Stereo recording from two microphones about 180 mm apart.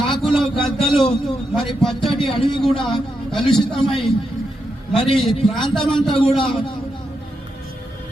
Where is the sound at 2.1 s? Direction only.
30° left (ahead or behind).